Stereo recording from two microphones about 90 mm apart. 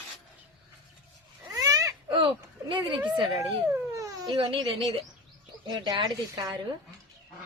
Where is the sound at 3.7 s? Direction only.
40° right (ahead or behind).